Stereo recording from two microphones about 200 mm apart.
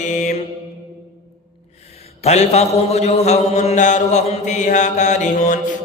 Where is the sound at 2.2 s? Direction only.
30° left (ahead or behind).